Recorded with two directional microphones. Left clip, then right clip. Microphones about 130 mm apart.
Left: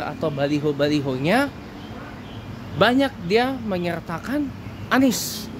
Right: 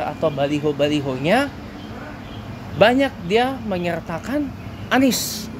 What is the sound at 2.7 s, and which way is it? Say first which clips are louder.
Speech: right 3 dB; 20° left (ahead or behind).